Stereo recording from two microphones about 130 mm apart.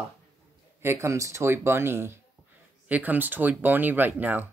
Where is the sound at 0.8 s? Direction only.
20° right (ahead or behind).